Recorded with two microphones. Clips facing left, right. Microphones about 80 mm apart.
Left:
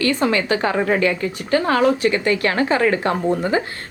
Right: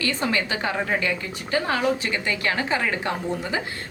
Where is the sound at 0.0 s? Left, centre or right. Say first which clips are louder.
Left 6 dB; left.